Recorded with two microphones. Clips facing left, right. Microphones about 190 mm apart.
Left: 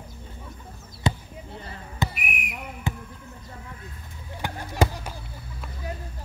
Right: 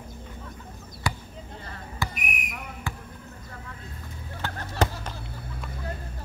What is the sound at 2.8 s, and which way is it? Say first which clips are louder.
Basketball bounce: left 6 dB; 20° left (ahead or behind).